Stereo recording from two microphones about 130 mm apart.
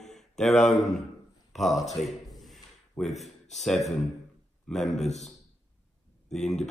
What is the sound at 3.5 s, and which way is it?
Speech, centre (ahead or behind).